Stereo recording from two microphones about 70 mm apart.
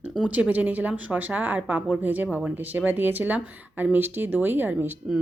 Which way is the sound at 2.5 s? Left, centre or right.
Right.